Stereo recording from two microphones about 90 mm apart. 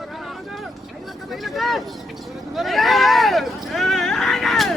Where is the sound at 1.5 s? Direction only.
Centre (ahead or behind).